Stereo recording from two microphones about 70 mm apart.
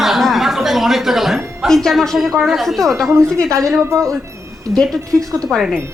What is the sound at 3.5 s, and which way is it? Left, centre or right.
Speech, right.